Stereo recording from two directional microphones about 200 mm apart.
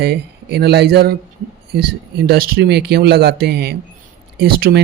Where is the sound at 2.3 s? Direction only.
50° right (ahead or behind).